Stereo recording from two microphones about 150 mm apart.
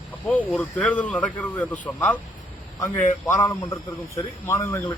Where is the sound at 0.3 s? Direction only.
10° left (ahead or behind).